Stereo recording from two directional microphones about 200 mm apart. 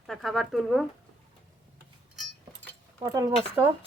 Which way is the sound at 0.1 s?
Centre (ahead or behind).